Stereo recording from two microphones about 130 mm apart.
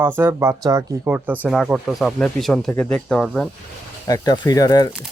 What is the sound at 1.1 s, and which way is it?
Speech, 15° right (ahead or behind).